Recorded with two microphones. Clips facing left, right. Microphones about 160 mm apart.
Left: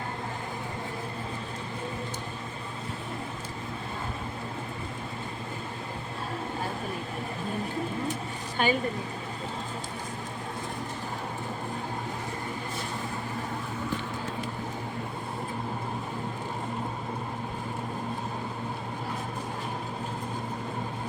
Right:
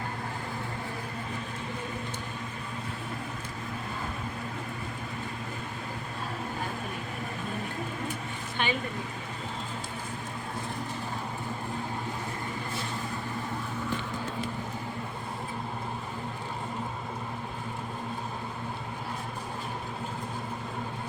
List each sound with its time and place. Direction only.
8.6 s speech: 40° left (ahead or behind)